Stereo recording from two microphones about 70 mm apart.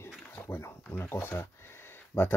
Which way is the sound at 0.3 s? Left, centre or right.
Left.